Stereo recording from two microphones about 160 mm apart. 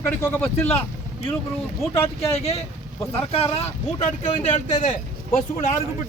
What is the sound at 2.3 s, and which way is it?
Speech, 40° left (ahead or behind).